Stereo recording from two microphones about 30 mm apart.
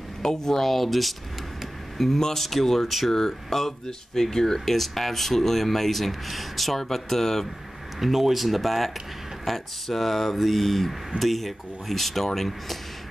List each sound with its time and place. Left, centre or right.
0.2 s speech: centre
2.0 s speech: centre
8.0 s speech: centre